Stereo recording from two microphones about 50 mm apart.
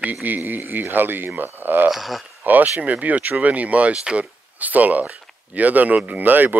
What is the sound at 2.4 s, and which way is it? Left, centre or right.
Speech, right.